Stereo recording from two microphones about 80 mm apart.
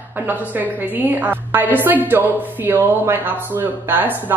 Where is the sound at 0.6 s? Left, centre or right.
Right.